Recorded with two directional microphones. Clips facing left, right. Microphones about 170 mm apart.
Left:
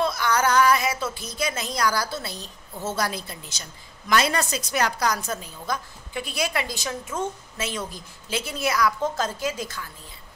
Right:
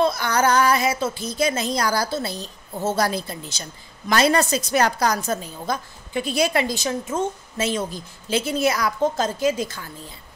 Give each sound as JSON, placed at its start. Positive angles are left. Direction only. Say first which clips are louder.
{"t": 0.0, "sound": "a woman's voice", "louder": "right 3 dB", "side_deg": -30}